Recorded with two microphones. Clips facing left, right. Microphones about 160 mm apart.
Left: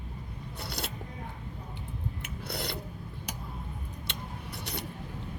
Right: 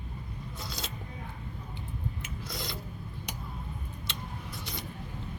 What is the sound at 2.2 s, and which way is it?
Filing, 65° left (ahead or behind).